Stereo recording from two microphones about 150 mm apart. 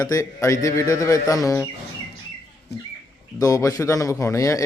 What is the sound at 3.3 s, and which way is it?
Speech, 20° left (ahead or behind).